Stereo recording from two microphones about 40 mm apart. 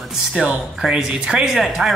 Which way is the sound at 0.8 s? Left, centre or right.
Centre.